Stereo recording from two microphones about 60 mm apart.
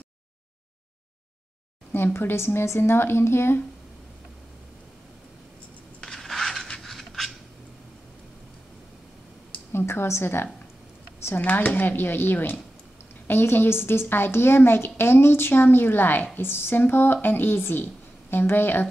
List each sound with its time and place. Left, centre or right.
2.1 s speech: left
5.9 s a sound: centre
9.7 s a woman's voice: left
11.4 s a woman's voice: left